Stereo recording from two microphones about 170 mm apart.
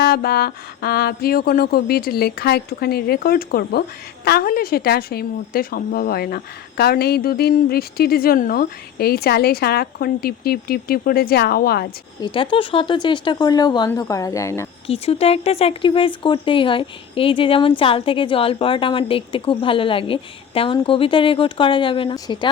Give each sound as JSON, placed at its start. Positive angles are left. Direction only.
{"t": 0.0, "sound": "speech", "side_deg": 65}
{"t": 12.2, "sound": "speech", "side_deg": 30}
{"t": 14.8, "sound": "speech", "side_deg": 35}